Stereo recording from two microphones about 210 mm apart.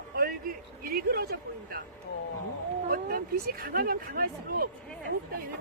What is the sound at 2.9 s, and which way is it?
Speech, 45° right (ahead or behind).